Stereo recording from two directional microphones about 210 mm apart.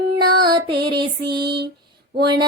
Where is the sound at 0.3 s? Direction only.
20° right (ahead or behind).